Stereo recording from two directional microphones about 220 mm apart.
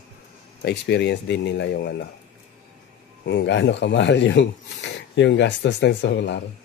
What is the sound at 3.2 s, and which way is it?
Speech, 55° left (ahead or behind).